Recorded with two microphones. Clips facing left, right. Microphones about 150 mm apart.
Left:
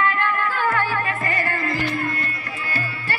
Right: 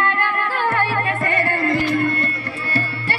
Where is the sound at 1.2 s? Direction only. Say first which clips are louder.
Right 5 dB; 65° right (ahead or behind).